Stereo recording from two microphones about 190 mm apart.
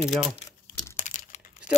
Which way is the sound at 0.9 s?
40° left (ahead or behind).